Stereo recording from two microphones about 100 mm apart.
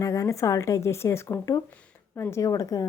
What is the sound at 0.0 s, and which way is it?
A woman's voice, 35° left (ahead or behind).